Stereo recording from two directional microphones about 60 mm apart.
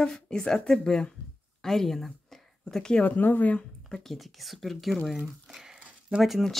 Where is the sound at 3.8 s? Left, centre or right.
Centre.